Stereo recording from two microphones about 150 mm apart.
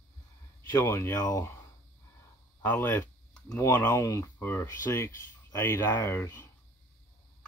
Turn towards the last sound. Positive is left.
turn(degrees=15)  # may be behind; listen again after turning